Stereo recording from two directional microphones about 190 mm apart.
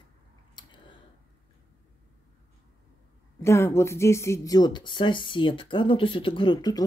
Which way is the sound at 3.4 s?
15° left (ahead or behind).